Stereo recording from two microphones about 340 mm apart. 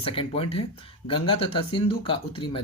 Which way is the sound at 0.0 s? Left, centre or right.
Centre.